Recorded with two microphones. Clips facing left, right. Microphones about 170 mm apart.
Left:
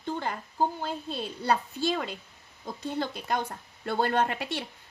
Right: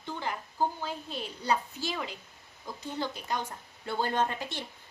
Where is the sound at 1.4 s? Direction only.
60° left (ahead or behind).